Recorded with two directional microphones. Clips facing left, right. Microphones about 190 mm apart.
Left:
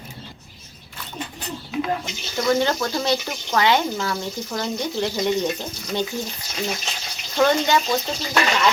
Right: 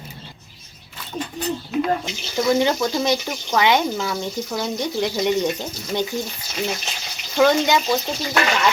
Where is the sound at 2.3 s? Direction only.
15° right (ahead or behind).